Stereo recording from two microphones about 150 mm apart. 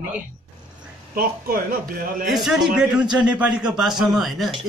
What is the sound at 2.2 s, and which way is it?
A man's voice, centre (ahead or behind).